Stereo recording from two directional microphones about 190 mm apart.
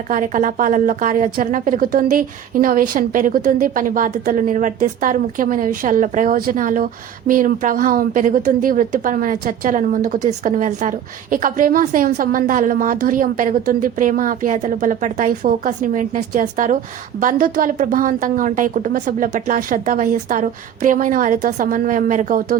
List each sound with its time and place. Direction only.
0.1 s speech: 45° right (ahead or behind)